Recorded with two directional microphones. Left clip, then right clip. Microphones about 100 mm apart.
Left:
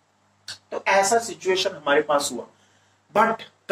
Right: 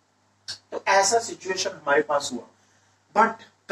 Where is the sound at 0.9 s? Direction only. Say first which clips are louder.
Left 1 dB; 55° left (ahead or behind).